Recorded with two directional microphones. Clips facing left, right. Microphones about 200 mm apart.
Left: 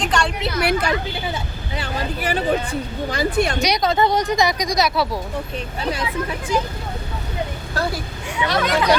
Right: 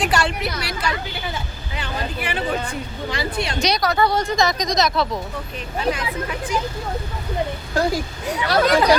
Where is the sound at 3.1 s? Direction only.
45° left (ahead or behind).